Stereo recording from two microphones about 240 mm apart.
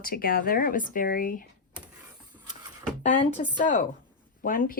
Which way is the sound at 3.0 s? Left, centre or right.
Left.